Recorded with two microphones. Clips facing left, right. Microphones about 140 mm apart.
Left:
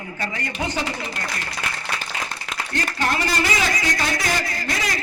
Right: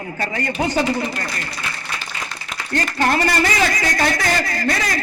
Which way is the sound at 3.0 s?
50° right (ahead or behind).